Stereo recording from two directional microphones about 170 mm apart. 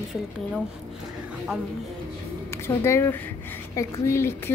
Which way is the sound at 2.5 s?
15° left (ahead or behind).